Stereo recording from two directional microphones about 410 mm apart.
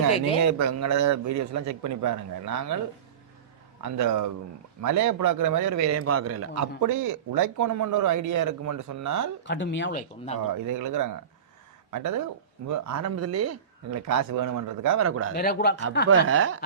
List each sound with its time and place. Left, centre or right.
0.4 s a man's voice: right
3.8 s a man's voice: right
9.4 s speech: left
10.3 s a man's voice: right
15.4 s speech: left
16.0 s speech: right